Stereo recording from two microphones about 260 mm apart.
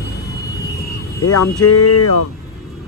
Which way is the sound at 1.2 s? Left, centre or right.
Left.